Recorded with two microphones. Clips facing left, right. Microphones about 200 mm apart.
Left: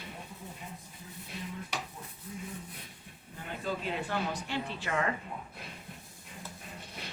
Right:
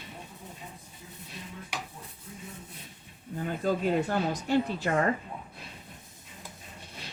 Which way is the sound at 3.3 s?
45° right (ahead or behind).